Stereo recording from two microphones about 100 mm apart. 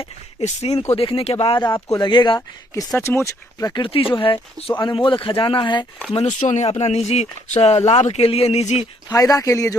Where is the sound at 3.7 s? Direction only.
60° left (ahead or behind).